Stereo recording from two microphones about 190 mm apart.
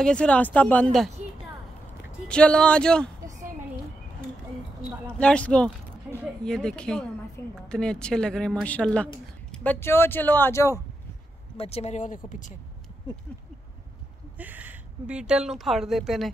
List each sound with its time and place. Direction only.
0.0 s speech: 5° left (ahead or behind)
2.2 s speech: 5° left (ahead or behind)
5.2 s speech: 5° left (ahead or behind)
11.5 s speech: 30° left (ahead or behind)
14.4 s speech: 10° right (ahead or behind)